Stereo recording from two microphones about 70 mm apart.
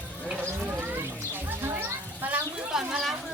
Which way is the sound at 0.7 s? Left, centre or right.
Right.